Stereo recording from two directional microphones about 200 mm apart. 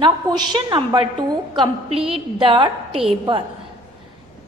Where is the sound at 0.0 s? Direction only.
20° right (ahead or behind).